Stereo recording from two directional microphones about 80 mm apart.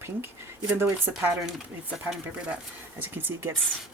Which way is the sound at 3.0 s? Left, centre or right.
Right.